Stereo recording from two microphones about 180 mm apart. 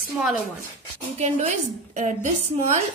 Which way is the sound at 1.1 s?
35° right (ahead or behind).